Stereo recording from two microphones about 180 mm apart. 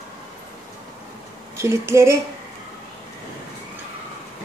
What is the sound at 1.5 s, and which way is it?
Speech, 15° right (ahead or behind).